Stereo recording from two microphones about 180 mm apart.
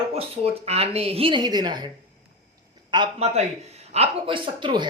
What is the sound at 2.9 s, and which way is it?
A man's voice, 25° right (ahead or behind).